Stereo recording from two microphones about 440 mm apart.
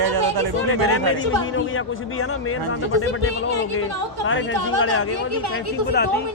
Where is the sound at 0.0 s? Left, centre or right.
Right.